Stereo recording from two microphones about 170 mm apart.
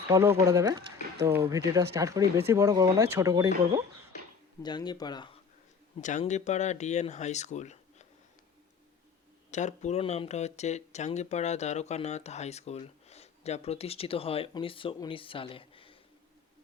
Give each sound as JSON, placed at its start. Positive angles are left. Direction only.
{"t": 0.1, "sound": "speech", "side_deg": -15}
{"t": 4.6, "sound": "speech", "side_deg": 25}
{"t": 6.0, "sound": "speech", "side_deg": 45}
{"t": 9.5, "sound": "speech", "side_deg": 45}